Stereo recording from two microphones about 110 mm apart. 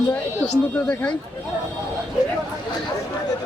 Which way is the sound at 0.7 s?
10° left (ahead or behind).